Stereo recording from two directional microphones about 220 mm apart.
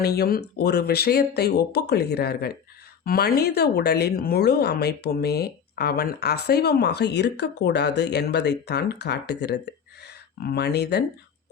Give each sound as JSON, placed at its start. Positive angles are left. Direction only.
{"t": 0.0, "sound": "speech", "side_deg": 45}